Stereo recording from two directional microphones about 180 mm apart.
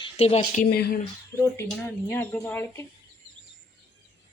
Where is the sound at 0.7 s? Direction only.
60° left (ahead or behind).